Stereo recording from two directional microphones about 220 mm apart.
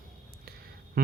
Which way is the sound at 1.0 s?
40° right (ahead or behind).